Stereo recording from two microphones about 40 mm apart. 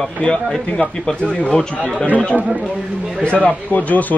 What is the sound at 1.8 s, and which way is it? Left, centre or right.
Speech, right.